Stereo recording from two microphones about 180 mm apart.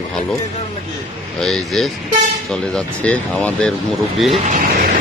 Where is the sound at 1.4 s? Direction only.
Centre (ahead or behind).